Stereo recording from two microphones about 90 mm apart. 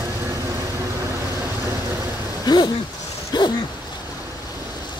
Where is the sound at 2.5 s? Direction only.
50° left (ahead or behind).